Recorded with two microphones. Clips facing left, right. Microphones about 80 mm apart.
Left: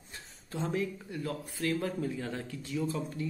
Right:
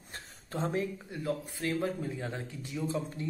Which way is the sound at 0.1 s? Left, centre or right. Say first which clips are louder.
Right 2 dB; right.